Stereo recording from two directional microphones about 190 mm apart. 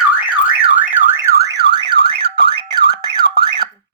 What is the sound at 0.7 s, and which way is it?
Car alarm, 10° right (ahead or behind).